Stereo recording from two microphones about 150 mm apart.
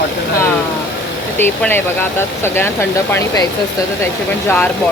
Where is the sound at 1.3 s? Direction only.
15° left (ahead or behind).